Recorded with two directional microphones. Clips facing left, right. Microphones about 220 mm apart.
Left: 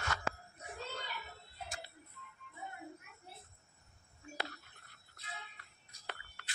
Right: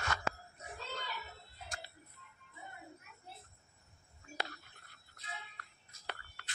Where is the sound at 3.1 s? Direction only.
55° left (ahead or behind).